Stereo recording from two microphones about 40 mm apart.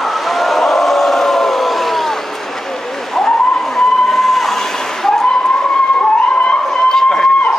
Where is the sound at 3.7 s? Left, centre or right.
Centre.